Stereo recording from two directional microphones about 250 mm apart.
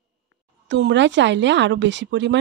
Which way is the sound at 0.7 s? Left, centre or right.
Right.